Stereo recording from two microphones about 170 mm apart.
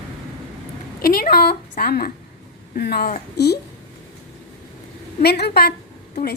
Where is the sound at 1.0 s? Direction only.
60° left (ahead or behind).